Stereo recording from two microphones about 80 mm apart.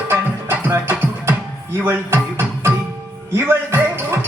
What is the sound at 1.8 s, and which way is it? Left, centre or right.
Music, right.